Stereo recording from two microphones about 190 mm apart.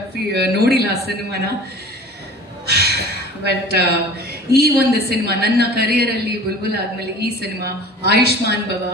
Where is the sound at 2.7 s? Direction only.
55° right (ahead or behind).